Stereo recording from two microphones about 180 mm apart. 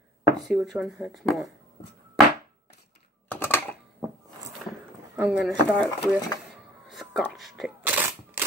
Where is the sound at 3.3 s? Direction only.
10° left (ahead or behind).